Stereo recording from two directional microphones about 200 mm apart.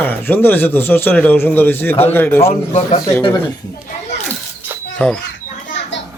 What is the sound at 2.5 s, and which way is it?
Speech, 35° left (ahead or behind).